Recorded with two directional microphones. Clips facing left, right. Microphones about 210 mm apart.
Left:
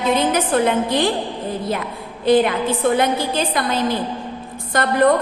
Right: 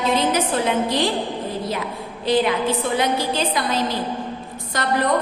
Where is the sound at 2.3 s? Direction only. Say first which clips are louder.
Left 3 dB; 55° left (ahead or behind).